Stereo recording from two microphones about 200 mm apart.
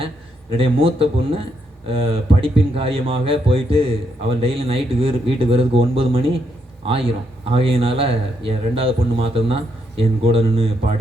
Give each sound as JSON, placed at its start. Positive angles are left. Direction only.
{"t": 0.5, "sound": "speech", "side_deg": -25}